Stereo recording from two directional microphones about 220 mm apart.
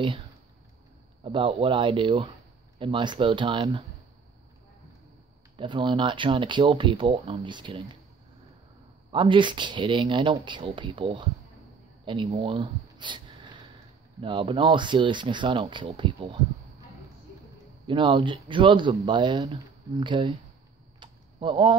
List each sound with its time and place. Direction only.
1.2 s speech: 25° right (ahead or behind)
5.6 s speech: 20° right (ahead or behind)
9.1 s speech: 20° right (ahead or behind)
17.8 s speech: 20° right (ahead or behind)
21.0 s a sound: 20° right (ahead or behind)